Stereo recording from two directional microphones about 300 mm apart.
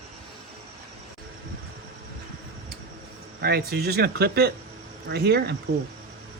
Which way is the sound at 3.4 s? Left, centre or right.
Right.